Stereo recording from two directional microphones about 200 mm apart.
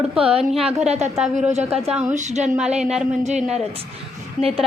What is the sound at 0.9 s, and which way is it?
Speech, 35° right (ahead or behind).